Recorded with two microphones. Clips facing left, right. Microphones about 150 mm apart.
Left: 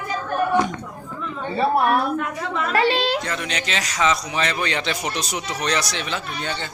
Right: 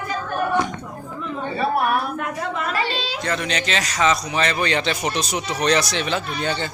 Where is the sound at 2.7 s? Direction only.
60° left (ahead or behind).